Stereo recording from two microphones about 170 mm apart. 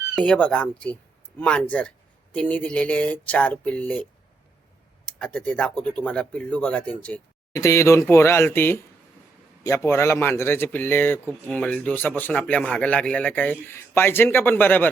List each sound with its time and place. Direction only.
0.2 s speech: 5° left (ahead or behind)
5.0 s speech: 5° left (ahead or behind)
7.5 s speech: 20° left (ahead or behind)